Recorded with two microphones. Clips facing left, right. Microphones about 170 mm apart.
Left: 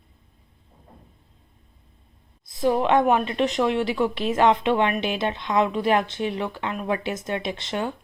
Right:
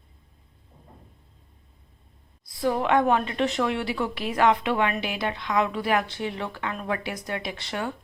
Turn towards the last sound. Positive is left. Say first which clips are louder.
# left 3 dB
turn(degrees=20)  # may be behind; listen again after turning